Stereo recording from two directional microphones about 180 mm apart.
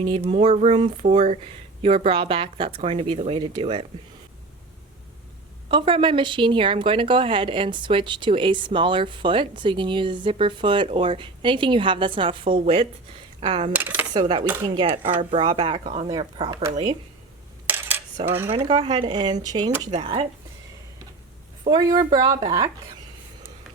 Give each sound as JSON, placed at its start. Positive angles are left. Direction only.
{"t": 0.0, "sound": "speech", "side_deg": -30}
{"t": 5.6, "sound": "a woman's voice", "side_deg": -30}
{"t": 13.4, "sound": "coin", "side_deg": -30}
{"t": 13.7, "sound": "cutlery", "side_deg": -10}
{"t": 14.1, "sound": "a woman's voice", "side_deg": -25}
{"t": 14.4, "sound": "speech", "side_deg": -10}
{"t": 14.8, "sound": "a woman's voice", "side_deg": -30}
{"t": 15.8, "sound": "speech", "side_deg": -45}
{"t": 16.0, "sound": "a woman's voice", "side_deg": -25}
{"t": 17.7, "sound": "coin", "side_deg": -10}
{"t": 18.3, "sound": "speech", "side_deg": -10}
{"t": 18.5, "sound": "a woman's voice", "side_deg": -30}
{"t": 19.9, "sound": "speech", "side_deg": -35}
{"t": 21.7, "sound": "a woman's voice", "side_deg": -20}